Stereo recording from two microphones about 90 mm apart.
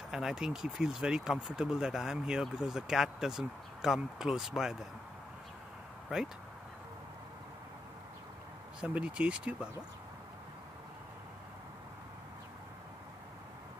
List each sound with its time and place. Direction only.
0.1 s speech: 5° right (ahead or behind)
6.0 s speech: 5° right (ahead or behind)
8.8 s speech: 15° right (ahead or behind)